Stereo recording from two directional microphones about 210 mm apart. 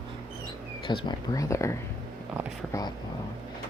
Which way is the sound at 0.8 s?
20° left (ahead or behind).